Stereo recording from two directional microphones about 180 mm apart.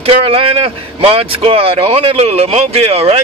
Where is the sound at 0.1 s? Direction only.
30° right (ahead or behind).